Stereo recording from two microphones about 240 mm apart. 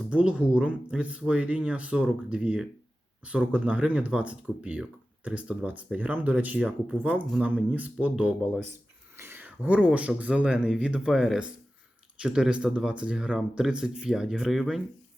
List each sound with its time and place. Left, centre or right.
0.1 s speech: centre